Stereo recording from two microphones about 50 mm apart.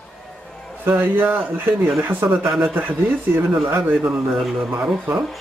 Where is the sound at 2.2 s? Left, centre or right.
Right.